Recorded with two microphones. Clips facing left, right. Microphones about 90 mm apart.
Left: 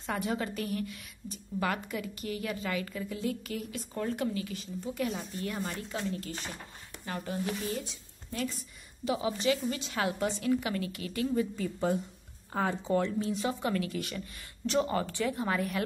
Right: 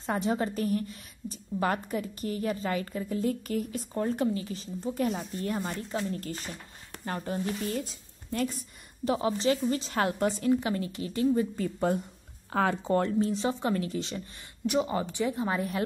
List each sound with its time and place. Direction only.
0.0 s a woman's voice: 30° right (ahead or behind)
10.4 s a woman's voice: 30° right (ahead or behind)
11.5 s speech: 45° right (ahead or behind)
13.3 s a woman's voice: 30° right (ahead or behind)